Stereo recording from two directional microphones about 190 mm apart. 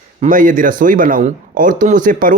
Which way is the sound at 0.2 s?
45° right (ahead or behind).